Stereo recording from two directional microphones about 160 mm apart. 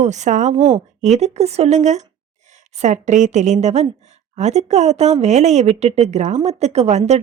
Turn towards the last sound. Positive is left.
turn(degrees=-45)  # may be behind; listen again after turning